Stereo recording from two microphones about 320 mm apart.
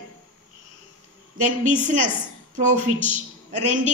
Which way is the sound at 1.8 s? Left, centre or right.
Right.